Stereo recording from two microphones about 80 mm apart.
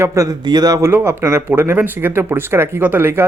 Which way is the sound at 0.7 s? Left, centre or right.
Right.